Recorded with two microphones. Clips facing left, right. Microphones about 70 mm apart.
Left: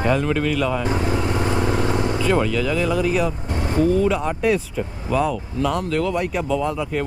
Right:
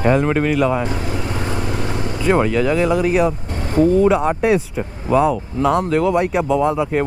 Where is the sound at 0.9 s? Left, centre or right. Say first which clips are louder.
Left 2 dB; left.